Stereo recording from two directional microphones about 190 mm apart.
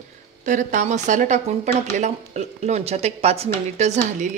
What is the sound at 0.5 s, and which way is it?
Speech, 40° right (ahead or behind).